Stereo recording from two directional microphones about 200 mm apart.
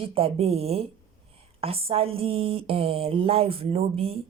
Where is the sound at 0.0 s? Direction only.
30° right (ahead or behind).